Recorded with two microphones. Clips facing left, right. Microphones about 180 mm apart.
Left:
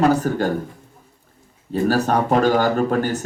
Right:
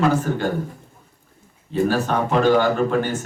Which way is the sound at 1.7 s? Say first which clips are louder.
Left 2 dB; 40° left (ahead or behind).